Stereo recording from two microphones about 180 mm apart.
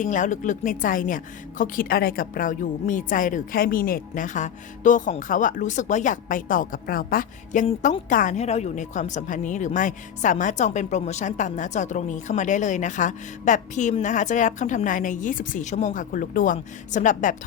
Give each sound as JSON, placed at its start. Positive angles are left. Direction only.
{"t": 0.0, "sound": "a woman's voice", "side_deg": 45}